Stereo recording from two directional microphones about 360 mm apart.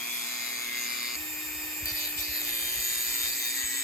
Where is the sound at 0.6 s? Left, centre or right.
Centre.